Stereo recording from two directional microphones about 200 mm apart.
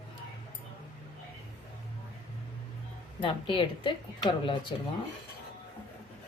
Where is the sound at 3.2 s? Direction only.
25° left (ahead or behind).